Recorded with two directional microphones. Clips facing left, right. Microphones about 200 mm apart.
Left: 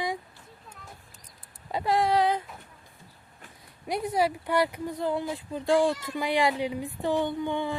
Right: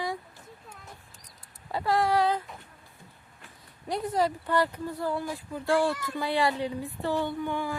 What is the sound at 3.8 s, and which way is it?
Speech, 10° left (ahead or behind).